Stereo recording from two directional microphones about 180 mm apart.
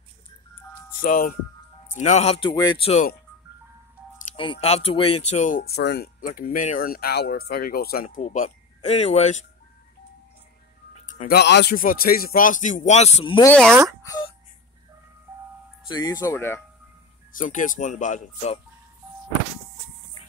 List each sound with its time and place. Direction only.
1.0 s speech: 50° left (ahead or behind); by 2.5 s 35° left (ahead or behind)
2.5 s speech: 25° left (ahead or behind)
4.4 s speech: 30° left (ahead or behind)
11.1 s music: 45° left (ahead or behind)
11.3 s speech: 70° left (ahead or behind); by 13.5 s 30° left (ahead or behind)
13.5 s speech: 5° left (ahead or behind)
15.9 s speech: 20° left (ahead or behind)
17.4 s speech: 45° left (ahead or behind)